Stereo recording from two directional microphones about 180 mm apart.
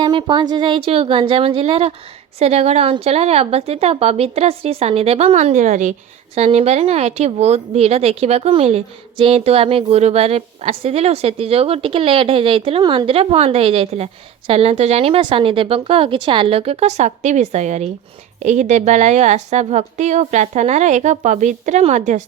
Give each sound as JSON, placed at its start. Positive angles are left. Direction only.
{"t": 0.0, "sound": "a woman's voice", "side_deg": -25}